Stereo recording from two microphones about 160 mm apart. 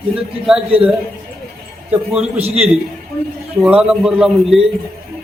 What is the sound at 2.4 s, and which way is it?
Speech, 40° right (ahead or behind).